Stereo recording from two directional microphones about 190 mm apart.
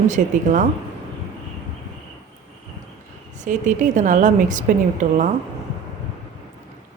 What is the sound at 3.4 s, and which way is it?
A woman's voice, 40° right (ahead or behind).